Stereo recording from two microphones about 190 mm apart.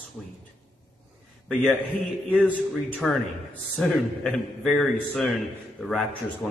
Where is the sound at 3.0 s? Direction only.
5° left (ahead or behind).